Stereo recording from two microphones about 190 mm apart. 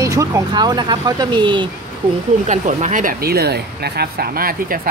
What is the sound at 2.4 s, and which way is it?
Speech, 40° right (ahead or behind).